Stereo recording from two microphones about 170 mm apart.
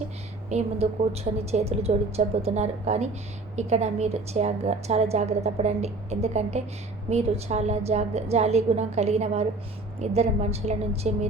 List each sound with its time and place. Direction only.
0.5 s a woman's voice: 40° right (ahead or behind)